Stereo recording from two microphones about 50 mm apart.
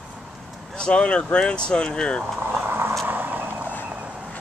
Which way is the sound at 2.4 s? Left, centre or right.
Right.